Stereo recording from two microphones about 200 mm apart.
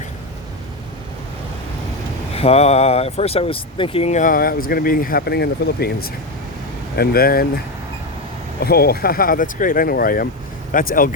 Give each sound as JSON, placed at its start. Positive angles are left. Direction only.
{"t": 2.3, "sound": "speech", "side_deg": 30}
{"t": 8.6, "sound": "speech", "side_deg": 50}